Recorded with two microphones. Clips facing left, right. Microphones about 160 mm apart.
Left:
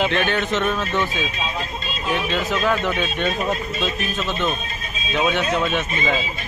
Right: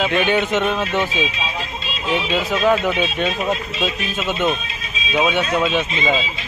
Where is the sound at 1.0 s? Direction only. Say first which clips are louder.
Right 2 dB; 45° left (ahead or behind).